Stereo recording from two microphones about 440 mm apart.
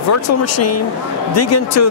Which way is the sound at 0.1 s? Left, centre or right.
Left.